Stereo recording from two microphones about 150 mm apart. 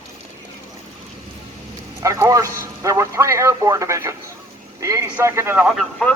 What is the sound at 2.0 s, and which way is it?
A man's voice, 20° right (ahead or behind).